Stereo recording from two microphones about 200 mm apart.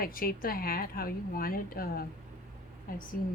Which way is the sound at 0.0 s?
45° left (ahead or behind).